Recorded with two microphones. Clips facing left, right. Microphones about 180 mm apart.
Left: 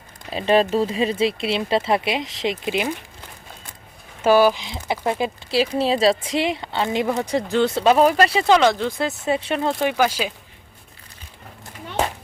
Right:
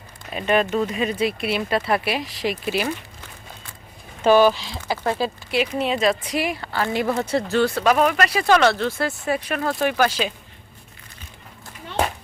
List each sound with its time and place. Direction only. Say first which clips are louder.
0.3 s speech: left 3 dB; 30° left (ahead or behind)
4.2 s speech: even; 10° left (ahead or behind)
5.5 s speech: left 4 dB; 30° left (ahead or behind); by 10.3 s 10° left (ahead or behind)